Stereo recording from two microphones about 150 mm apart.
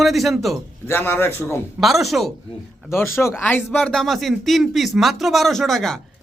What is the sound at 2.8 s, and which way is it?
Speech, 15° left (ahead or behind).